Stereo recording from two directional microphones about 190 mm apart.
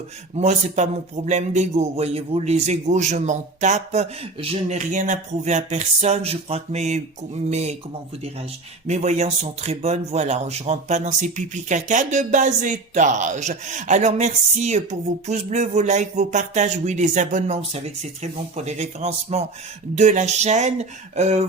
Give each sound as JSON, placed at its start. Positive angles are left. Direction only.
{"t": 0.3, "sound": "speech", "side_deg": -35}
{"t": 8.9, "sound": "speech", "side_deg": -35}